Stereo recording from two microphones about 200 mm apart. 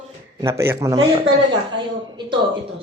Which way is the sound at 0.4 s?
15° right (ahead or behind).